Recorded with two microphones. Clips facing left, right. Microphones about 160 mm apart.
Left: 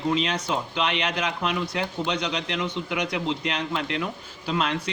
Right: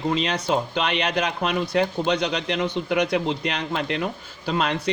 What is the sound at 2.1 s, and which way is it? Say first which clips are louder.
Speech: right 4 dB; 60° right (ahead or behind).